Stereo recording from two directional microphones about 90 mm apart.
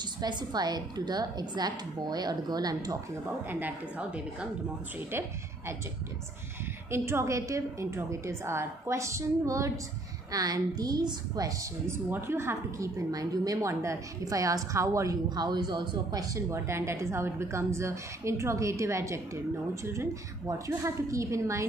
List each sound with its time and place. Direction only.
0.2 s a woman's voice: 50° right (ahead or behind)
3.4 s a woman's voice: 20° right (ahead or behind)
5.1 s a woman's voice: 30° right (ahead or behind)
6.9 s a woman's voice: 30° right (ahead or behind); by 11.5 s 45° right (ahead or behind)
11.9 s a woman's voice: 25° right (ahead or behind)
15.2 s a woman's voice: 50° right (ahead or behind)
16.3 s a woman's voice: 30° right (ahead or behind)